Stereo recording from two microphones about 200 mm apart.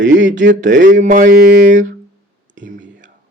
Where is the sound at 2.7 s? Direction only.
65° right (ahead or behind).